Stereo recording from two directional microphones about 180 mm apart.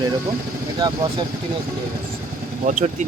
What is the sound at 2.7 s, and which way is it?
Speech, 50° right (ahead or behind).